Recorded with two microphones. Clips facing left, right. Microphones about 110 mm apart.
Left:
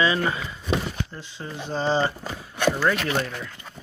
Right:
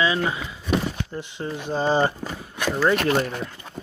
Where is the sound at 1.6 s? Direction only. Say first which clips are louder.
Right 2 dB; 10° right (ahead or behind).